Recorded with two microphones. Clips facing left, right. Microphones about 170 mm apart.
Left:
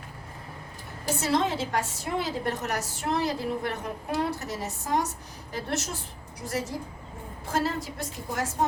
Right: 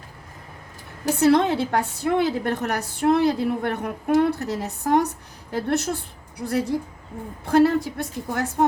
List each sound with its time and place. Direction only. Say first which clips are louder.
1.0 s a woman's voice: right 8 dB; 60° right (ahead or behind)